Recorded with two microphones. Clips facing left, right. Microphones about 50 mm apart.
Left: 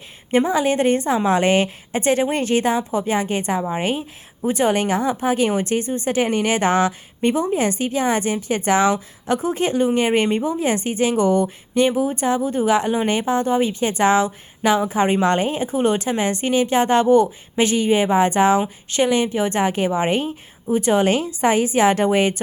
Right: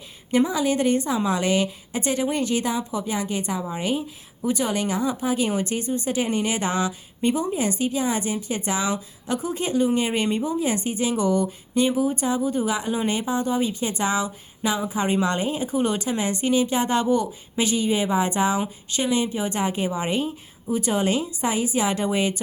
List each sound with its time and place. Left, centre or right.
0.3 s a woman's voice: left